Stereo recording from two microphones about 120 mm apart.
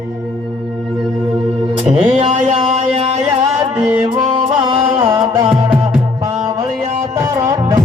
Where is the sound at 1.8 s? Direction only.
85° right.